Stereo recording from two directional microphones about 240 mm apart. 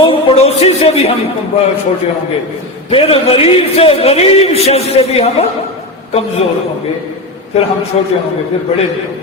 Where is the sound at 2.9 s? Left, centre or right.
Left.